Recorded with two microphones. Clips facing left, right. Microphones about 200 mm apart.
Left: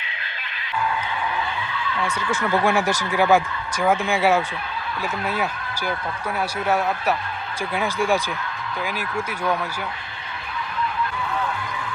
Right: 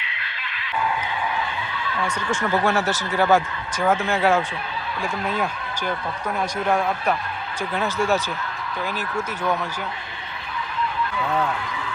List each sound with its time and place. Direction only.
2.0 s speech: 10° right (ahead or behind)
2.5 s speech: 10° left (ahead or behind)